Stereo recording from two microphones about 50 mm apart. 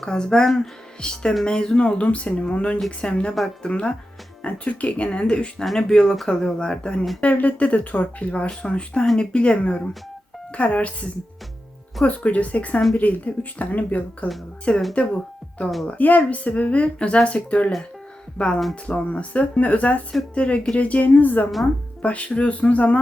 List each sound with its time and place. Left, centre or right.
0.0 s speech: centre
1.0 s speech: centre
5.6 s speech: centre
7.2 s speech: left
12.0 s speech: left
15.9 s speech: left